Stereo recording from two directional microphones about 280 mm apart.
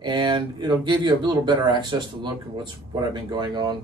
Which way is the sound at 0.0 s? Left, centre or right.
Centre.